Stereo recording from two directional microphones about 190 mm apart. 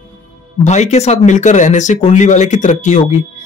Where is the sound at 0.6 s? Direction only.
35° left (ahead or behind).